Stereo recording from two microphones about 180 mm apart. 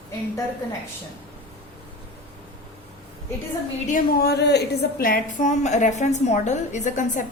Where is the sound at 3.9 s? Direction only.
60° left (ahead or behind).